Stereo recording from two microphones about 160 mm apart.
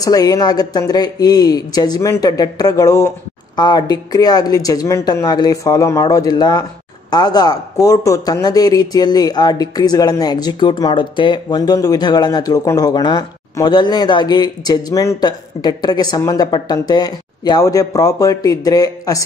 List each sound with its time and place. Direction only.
0.0 s speech: 20° left (ahead or behind)